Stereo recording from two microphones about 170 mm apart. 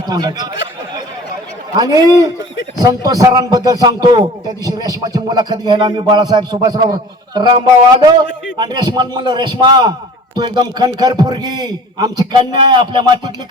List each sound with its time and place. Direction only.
0.1 s a man's voice: 25° right (ahead or behind)
1.7 s a man's voice: 25° right (ahead or behind)